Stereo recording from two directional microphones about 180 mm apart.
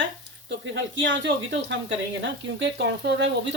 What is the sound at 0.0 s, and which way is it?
Speech, 90° right.